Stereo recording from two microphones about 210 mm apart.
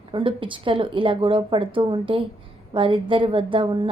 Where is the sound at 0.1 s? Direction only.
25° right (ahead or behind).